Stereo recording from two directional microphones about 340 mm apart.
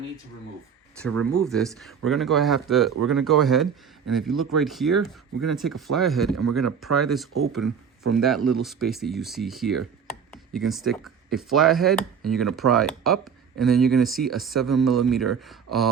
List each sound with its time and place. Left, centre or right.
1.1 s speech: right
1.5 s speech: centre
6.7 s speech: right
7.5 s speech: centre